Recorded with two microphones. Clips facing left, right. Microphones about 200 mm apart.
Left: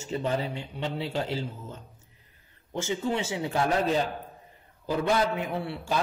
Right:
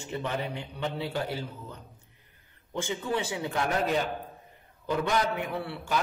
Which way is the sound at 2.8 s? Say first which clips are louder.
Left 2 dB; 25° left (ahead or behind).